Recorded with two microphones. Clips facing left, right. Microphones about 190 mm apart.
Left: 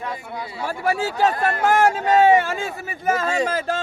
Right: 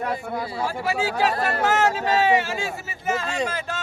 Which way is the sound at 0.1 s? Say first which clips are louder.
Right 4 dB; 45° right (ahead or behind).